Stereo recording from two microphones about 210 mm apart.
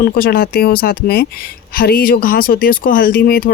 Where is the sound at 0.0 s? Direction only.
45° left (ahead or behind).